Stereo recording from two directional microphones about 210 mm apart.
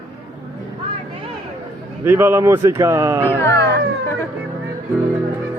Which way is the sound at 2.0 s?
10° right (ahead or behind).